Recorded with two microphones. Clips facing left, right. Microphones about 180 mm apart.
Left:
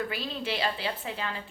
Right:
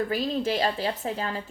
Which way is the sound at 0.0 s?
40° right (ahead or behind).